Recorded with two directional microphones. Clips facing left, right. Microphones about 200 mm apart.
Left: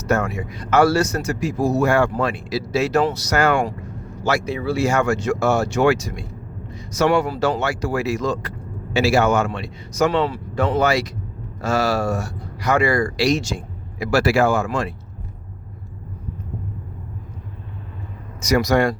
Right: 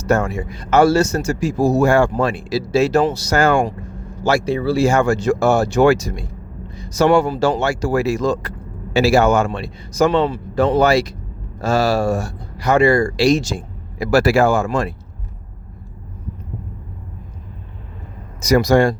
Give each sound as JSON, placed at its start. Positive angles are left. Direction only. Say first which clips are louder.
{"t": 0.0, "sound": "speech", "louder": "right 3 dB", "side_deg": -30}
{"t": 18.3, "sound": "speech", "louder": "right 4 dB", "side_deg": -35}